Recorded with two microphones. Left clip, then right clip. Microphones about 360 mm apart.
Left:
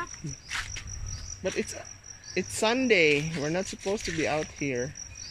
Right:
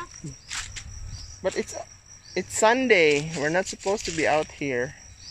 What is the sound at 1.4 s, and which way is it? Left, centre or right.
Cricket, right.